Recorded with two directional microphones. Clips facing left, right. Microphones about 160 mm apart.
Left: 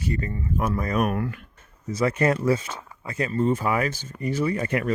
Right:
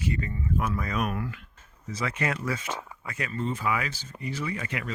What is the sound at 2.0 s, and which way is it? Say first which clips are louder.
Speech: left 9 dB; 40° left (ahead or behind).